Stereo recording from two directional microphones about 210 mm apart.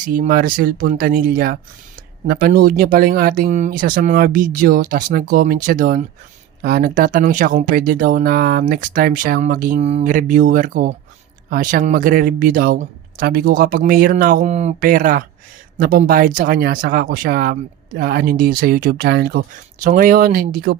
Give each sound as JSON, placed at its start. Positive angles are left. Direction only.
{"t": 0.1, "sound": "speech", "side_deg": -45}